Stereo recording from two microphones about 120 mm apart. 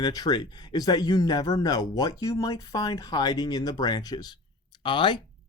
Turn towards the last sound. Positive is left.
turn(degrees=40)  # may be behind; listen again after turning